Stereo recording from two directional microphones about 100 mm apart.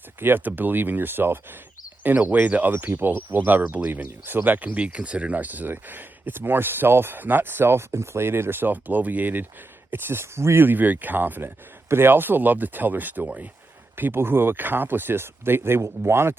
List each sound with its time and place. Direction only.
0.2 s speech: 20° right (ahead or behind)